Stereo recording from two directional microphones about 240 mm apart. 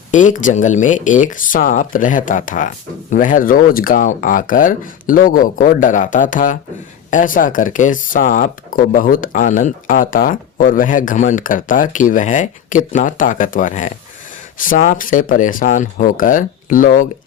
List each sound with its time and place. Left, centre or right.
0.1 s speech: left